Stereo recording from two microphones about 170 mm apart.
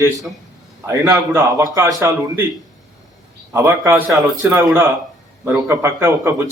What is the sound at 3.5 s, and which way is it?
A man's voice, 15° right (ahead or behind).